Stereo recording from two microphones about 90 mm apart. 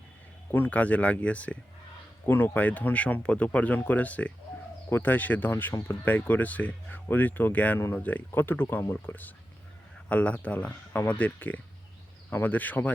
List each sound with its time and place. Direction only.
0.5 s speech: 20° left (ahead or behind)